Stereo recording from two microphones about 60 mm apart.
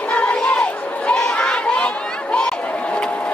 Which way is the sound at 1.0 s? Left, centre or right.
Centre.